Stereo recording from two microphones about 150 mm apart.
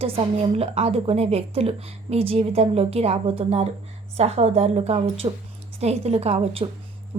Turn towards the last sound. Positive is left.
turn(degrees=-40)  # may be behind; listen again after turning